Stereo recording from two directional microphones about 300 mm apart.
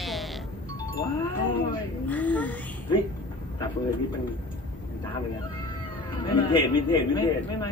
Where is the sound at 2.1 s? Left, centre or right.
Centre.